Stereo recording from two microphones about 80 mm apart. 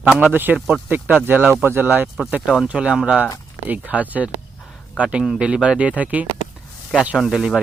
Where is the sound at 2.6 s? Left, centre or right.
Centre.